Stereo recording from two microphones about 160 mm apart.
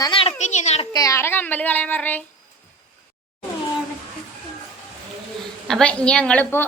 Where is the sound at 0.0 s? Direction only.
35° left (ahead or behind).